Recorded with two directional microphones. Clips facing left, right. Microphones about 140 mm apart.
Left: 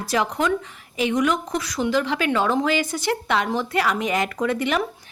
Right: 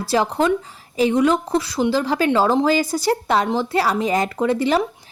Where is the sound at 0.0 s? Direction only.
30° right (ahead or behind).